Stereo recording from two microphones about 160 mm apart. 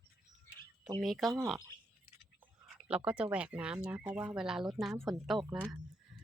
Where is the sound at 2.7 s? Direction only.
10° right (ahead or behind).